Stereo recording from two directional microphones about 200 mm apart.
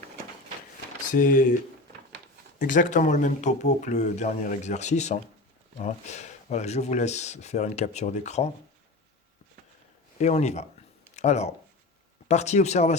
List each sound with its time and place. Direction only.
1.1 s speech: 40° left (ahead or behind)
2.6 s speech: 40° left (ahead or behind)
10.2 s speech: 35° left (ahead or behind)